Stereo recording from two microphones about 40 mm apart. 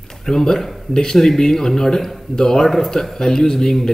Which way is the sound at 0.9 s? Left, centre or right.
Centre.